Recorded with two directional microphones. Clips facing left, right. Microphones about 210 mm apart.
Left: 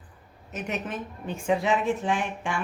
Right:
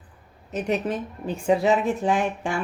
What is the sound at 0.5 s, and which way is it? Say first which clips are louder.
A woman's voice: right 7 dB; 35° right (ahead or behind).